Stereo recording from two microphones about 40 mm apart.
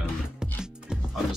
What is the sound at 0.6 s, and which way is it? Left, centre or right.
Music, centre.